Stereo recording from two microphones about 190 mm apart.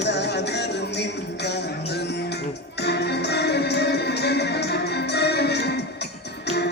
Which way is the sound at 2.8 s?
60° left (ahead or behind).